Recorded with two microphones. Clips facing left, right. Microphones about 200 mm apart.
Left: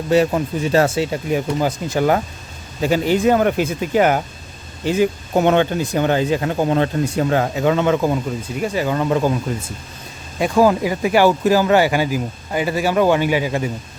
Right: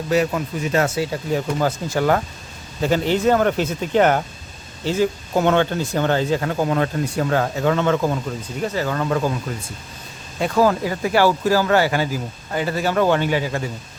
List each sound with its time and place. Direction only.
0.1 s speech: 30° left (ahead or behind)
10.4 s speech: 15° left (ahead or behind)